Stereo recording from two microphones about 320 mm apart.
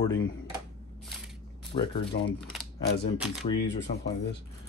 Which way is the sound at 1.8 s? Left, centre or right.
Centre.